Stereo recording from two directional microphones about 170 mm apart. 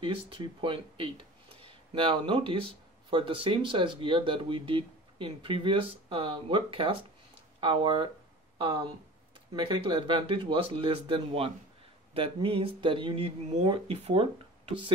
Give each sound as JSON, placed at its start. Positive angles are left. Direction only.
{"t": 0.0, "sound": "speech", "side_deg": -30}